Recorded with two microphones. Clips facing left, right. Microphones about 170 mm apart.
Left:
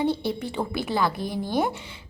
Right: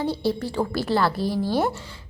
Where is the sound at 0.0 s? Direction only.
20° left (ahead or behind).